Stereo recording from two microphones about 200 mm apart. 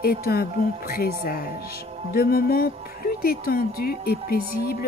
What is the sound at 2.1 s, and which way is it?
Speech, 50° left (ahead or behind).